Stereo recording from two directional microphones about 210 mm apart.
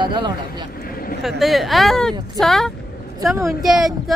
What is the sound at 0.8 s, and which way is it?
Vehicle, 45° left (ahead or behind).